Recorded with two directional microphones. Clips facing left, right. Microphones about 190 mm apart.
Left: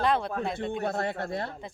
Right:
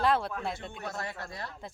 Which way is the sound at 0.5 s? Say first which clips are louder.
Left 9 dB; 55° left (ahead or behind).